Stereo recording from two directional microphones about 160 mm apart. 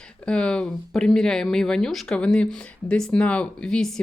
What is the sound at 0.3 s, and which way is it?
Speech, 5° left (ahead or behind).